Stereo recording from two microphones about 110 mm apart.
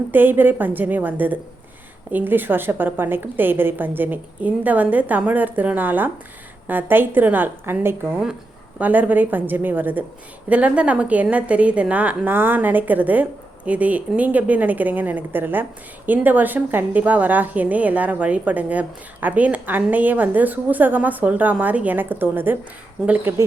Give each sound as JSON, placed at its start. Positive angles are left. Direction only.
{"t": 0.1, "sound": "a woman's voice", "side_deg": -20}